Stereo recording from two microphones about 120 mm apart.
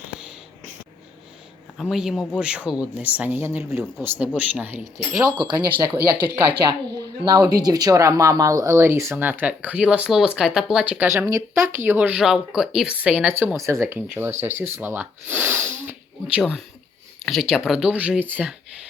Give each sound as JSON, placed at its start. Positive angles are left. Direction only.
{"t": 1.8, "sound": "speech", "side_deg": -5}
{"t": 7.3, "sound": "speech", "side_deg": -30}
{"t": 16.4, "sound": "speech", "side_deg": 0}